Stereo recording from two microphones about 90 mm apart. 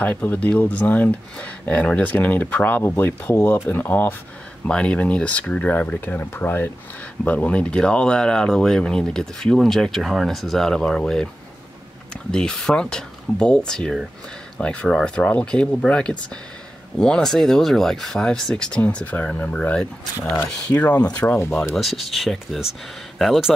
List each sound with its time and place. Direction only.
0.0 s speech: 20° left (ahead or behind)
4.6 s speech: 10° left (ahead or behind)
12.3 s speech: 5° left (ahead or behind)
21.2 s speech: 25° left (ahead or behind)
21.7 s speech: centre (ahead or behind)